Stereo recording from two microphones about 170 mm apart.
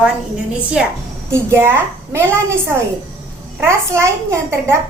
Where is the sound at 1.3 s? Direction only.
15° right (ahead or behind).